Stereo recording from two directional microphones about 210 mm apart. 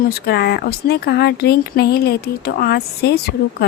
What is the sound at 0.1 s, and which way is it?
A woman's voice, 50° left (ahead or behind).